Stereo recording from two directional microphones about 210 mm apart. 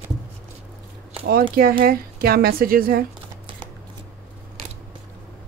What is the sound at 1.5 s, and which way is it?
A woman's voice, 45° right (ahead or behind).